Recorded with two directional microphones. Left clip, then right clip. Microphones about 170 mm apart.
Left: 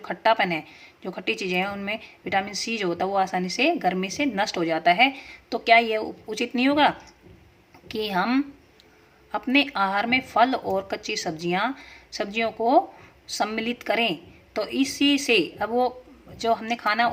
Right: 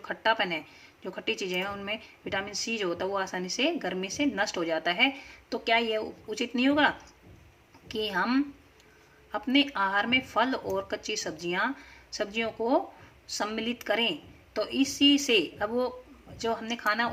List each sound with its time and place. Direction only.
0.0 s a woman's voice: 15° left (ahead or behind)